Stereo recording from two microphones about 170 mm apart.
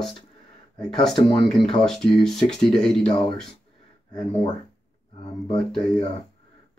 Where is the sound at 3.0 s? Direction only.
30° left (ahead or behind).